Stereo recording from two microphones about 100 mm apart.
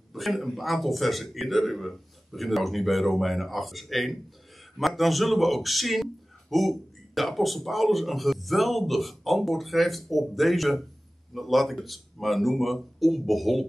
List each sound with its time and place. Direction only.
0.1 s speech: centre (ahead or behind)